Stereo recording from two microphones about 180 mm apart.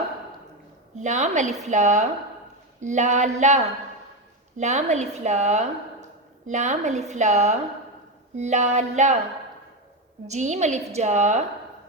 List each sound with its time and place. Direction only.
0.9 s a woman's voice: 40° right (ahead or behind)
10.2 s a woman's voice: 40° right (ahead or behind)